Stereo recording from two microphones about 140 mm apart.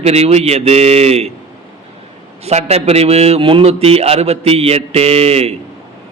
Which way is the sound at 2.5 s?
50° right (ahead or behind).